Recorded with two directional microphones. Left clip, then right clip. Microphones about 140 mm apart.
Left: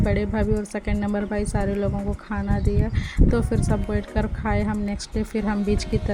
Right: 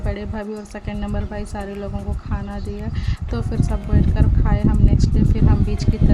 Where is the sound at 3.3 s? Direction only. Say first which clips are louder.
Left 2 dB; 25° left (ahead or behind).